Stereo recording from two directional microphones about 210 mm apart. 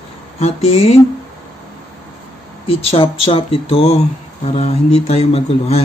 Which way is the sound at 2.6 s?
25° left (ahead or behind).